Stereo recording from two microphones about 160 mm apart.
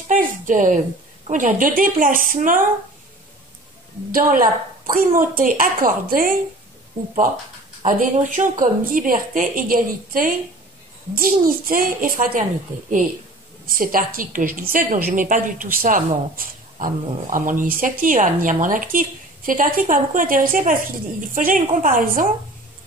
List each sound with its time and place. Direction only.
0.1 s a woman's voice: 50° right (ahead or behind)
4.1 s speech: 60° right (ahead or behind)
7.8 s speech: 50° right (ahead or behind)
13.7 s speech: 60° right (ahead or behind)